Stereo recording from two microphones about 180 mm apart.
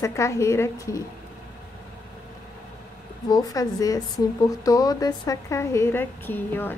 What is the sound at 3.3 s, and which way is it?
A woman's voice, 20° left (ahead or behind).